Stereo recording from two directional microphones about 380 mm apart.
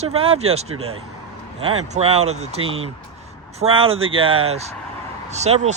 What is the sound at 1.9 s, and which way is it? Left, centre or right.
Speech, centre.